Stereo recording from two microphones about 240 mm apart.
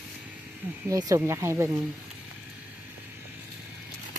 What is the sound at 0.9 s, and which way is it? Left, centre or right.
Speech, centre.